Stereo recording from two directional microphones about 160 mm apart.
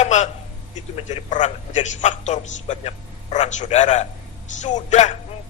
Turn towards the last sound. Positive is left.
turn(degrees=45)  # may be behind; listen again after turning